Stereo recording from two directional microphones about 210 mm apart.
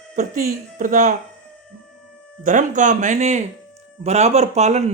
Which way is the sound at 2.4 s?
40° right (ahead or behind).